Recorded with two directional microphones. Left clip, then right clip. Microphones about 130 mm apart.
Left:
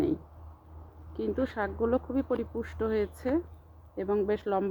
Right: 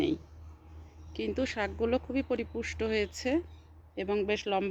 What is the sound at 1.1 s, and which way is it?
Speech, centre (ahead or behind).